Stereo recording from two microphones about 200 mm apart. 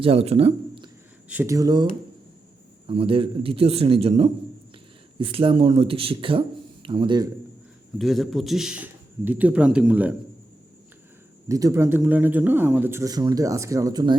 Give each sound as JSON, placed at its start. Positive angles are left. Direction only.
{"t": 0.0, "sound": "speech", "side_deg": -30}
{"t": 1.3, "sound": "a man's voice", "side_deg": -10}
{"t": 7.9, "sound": "a man's voice", "side_deg": 0}
{"t": 11.4, "sound": "speech", "side_deg": -15}